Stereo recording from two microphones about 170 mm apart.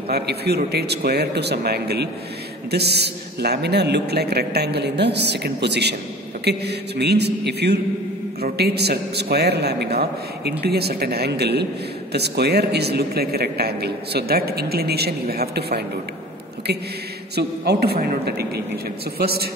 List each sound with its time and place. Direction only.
0.1 s a man's voice: 70° right (ahead or behind)
17.4 s a man's voice: 70° right (ahead or behind)